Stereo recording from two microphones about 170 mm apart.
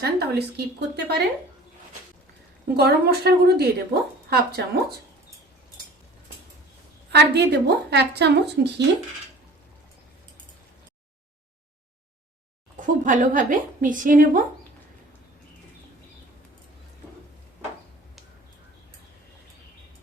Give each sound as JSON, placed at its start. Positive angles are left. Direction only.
{"t": 0.0, "sound": "a woman's voice", "side_deg": -75}
{"t": 2.7, "sound": "a woman's voice", "side_deg": -70}
{"t": 7.1, "sound": "a woman's voice", "side_deg": -80}
{"t": 12.8, "sound": "a woman's voice", "side_deg": -50}